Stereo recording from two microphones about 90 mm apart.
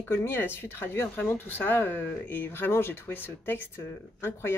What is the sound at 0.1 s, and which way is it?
Speech, 25° left (ahead or behind).